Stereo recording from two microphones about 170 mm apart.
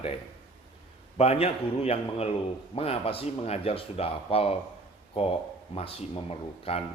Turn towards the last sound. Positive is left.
turn(degrees=35)  # may be behind; listen again after turning